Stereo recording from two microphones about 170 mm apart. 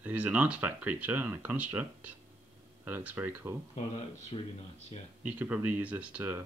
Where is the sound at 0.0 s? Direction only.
10° right (ahead or behind).